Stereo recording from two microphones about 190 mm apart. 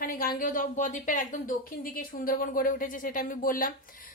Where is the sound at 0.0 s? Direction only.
50° left (ahead or behind).